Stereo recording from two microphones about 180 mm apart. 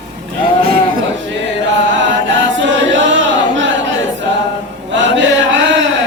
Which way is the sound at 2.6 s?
90° right.